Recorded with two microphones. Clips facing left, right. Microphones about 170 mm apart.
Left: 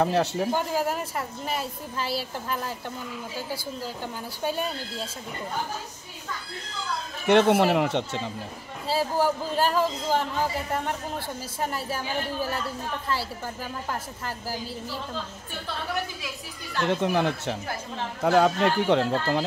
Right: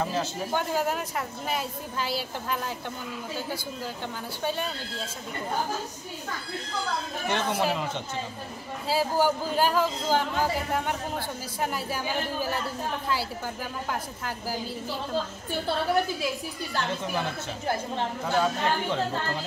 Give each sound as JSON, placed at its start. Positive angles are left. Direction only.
{"t": 0.0, "sound": "speech", "side_deg": 65}
{"t": 0.5, "sound": "a child's voice", "side_deg": 5}
{"t": 7.2, "sound": "speech", "side_deg": 65}
{"t": 8.8, "sound": "a child's voice", "side_deg": 0}
{"t": 11.6, "sound": "a child's voice", "side_deg": 0}
{"t": 16.8, "sound": "speech", "side_deg": 65}